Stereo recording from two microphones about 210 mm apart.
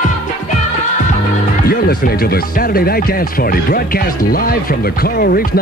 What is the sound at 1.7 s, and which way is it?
Speech, 45° left (ahead or behind).